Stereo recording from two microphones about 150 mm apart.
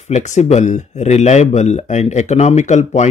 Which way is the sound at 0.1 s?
50° left (ahead or behind).